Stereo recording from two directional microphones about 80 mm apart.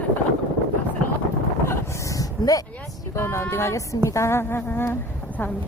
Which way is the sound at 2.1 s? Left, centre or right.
Left.